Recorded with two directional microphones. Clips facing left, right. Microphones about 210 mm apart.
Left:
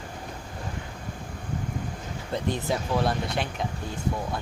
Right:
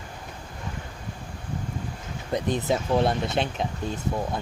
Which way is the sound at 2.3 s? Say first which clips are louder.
Right 3 dB; 20° right (ahead or behind).